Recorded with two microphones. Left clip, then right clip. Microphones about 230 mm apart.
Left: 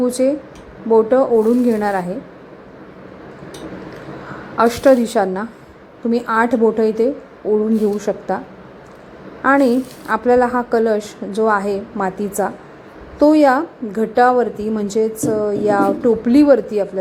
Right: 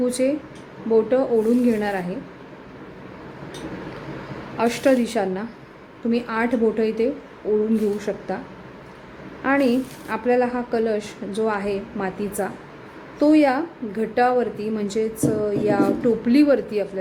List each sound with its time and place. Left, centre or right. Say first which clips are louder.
0.0 s a woman's voice: left 5 dB; centre
4.5 s a woman's voice: left 7 dB; centre
9.4 s a woman's voice: left 6 dB; centre